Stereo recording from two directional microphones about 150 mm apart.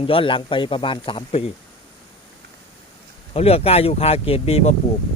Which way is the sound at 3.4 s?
40° left (ahead or behind).